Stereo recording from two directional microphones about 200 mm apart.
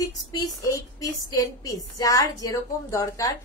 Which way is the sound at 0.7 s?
15° left (ahead or behind).